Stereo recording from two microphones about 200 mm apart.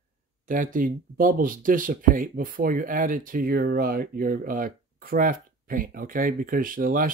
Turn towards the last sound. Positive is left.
turn(degrees=-45)  # may be behind; listen again after turning